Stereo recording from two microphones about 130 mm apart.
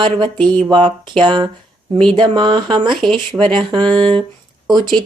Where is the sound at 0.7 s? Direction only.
35° right (ahead or behind).